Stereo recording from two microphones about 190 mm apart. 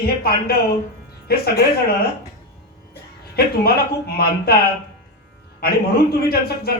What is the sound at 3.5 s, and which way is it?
A man's voice, 55° left (ahead or behind).